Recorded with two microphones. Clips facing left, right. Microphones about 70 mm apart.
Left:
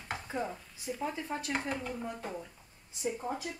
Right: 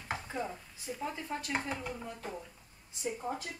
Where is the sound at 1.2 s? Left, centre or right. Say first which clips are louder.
Left 1 dB; centre.